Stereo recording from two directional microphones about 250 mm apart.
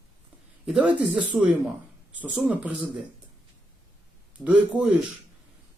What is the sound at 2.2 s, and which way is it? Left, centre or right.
Speech, centre.